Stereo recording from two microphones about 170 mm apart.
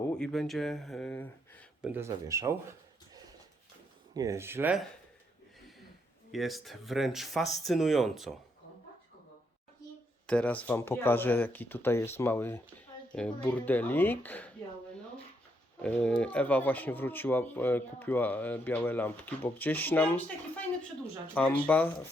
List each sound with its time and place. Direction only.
0.1 s speech: 5° left (ahead or behind)
1.8 s speech: 10° right (ahead or behind)
4.1 s speech: 20° right (ahead or behind)
6.3 s speech: centre (ahead or behind)
10.2 s speech: 5° left (ahead or behind)
15.8 s speech: 5° left (ahead or behind)